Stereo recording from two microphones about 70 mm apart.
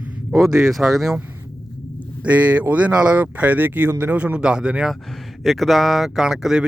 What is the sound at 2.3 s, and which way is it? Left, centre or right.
Speech, centre.